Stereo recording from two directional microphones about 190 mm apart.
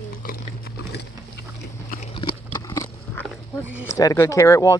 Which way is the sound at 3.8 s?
15° left (ahead or behind).